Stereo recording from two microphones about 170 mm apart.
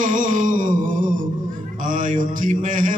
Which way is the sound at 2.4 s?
50° right (ahead or behind).